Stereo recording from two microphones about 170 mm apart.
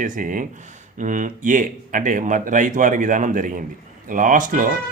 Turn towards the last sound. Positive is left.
turn(degrees=-50)  # may be behind; listen again after turning